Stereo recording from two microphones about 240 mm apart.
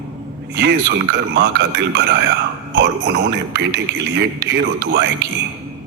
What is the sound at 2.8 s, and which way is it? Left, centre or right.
A man's voice, right.